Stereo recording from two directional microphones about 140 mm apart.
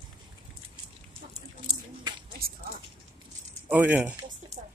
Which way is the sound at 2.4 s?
90° right.